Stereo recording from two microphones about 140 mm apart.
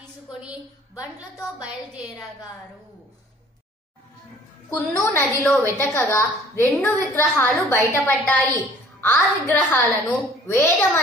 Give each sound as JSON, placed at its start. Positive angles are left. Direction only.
{"t": 0.3, "sound": "a sound", "side_deg": -5}
{"t": 4.6, "sound": "a woman's voice", "side_deg": 15}
{"t": 5.9, "sound": "a woman's voice", "side_deg": 20}